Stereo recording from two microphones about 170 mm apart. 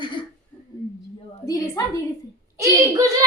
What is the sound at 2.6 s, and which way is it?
Speech, 20° right (ahead or behind).